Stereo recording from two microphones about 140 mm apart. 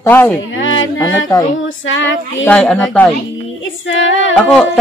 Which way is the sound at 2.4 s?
10° left (ahead or behind).